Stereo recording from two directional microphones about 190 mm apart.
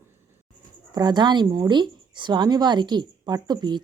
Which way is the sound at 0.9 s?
20° right (ahead or behind).